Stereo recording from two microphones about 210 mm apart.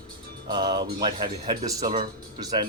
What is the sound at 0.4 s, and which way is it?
Speech, 20° right (ahead or behind).